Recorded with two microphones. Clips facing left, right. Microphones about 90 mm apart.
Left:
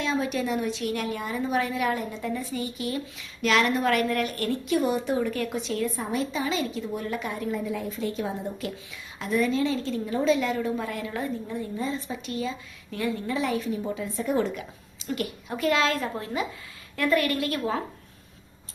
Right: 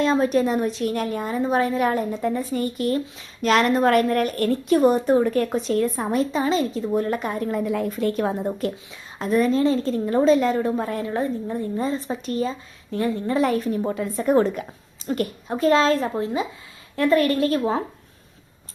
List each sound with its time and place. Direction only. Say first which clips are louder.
0.0 s a woman's voice: right 8 dB; 40° right (ahead or behind)
9.1 s a woman's voice: right 5 dB; 40° right (ahead or behind)